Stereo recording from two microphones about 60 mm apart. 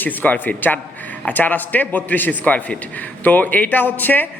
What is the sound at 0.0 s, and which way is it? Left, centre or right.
A man's voice, left.